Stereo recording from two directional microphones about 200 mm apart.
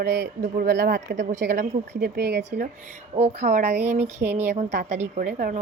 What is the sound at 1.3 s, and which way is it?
Speech, 40° right (ahead or behind).